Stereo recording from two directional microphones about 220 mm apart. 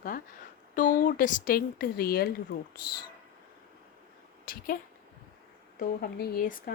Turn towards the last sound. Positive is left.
turn(degrees=40)  # may be behind; listen again after turning